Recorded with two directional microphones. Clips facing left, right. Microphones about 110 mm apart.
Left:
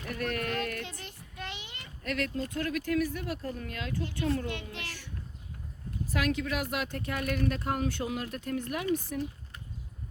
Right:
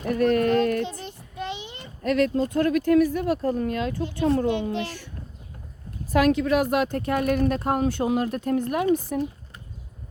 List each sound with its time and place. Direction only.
0.0 s child singing: 35° right (ahead or behind)
2.0 s a child's voice: 35° right (ahead or behind)
6.1 s speech: 45° right (ahead or behind)